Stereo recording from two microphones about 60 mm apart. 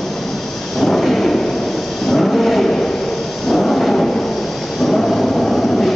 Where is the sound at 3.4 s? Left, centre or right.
Centre.